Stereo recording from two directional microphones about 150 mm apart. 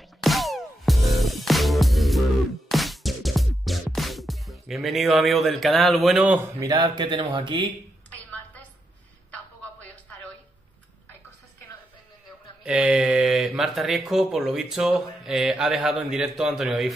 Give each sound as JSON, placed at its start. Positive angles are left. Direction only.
{"t": 0.2, "sound": "music", "side_deg": 0}
{"t": 6.6, "sound": "speech", "side_deg": -30}
{"t": 9.3, "sound": "a sound", "side_deg": 10}
{"t": 12.6, "sound": "speech", "side_deg": -5}